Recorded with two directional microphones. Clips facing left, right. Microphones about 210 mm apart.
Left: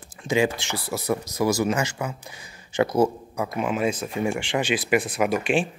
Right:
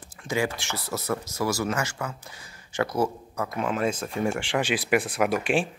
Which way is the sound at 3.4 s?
10° left (ahead or behind).